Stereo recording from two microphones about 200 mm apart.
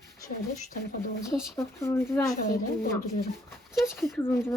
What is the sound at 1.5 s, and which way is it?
Speech, 10° left (ahead or behind).